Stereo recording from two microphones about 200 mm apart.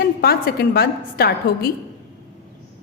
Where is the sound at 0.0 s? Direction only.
50° left (ahead or behind).